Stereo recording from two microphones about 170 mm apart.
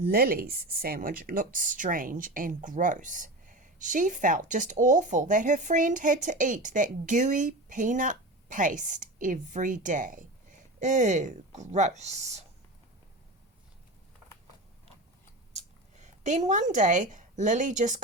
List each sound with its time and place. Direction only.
0.0 s speech: 60° right (ahead or behind); by 12.5 s 40° right (ahead or behind)
15.5 s speech: 45° right (ahead or behind)